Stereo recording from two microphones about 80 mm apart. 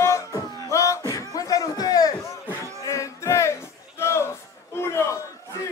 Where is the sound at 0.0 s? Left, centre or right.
Left.